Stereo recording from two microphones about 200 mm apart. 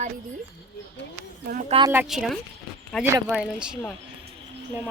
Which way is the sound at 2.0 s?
Centre (ahead or behind).